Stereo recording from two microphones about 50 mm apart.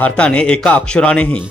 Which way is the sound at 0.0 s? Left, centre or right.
Left.